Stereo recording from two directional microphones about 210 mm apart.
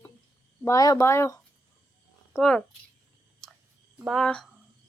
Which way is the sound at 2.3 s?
5° left (ahead or behind).